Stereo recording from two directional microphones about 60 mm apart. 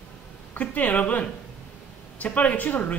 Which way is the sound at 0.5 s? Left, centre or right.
Left.